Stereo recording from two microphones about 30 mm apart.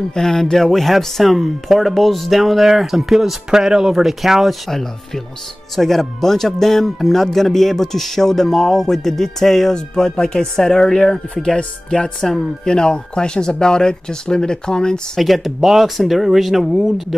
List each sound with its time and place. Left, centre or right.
0.1 s speech: centre
0.7 s speech: centre
3.4 s speech: right
3.9 s speech: centre
4.6 s speech: centre
11.5 s speech: left
15.1 s speech: centre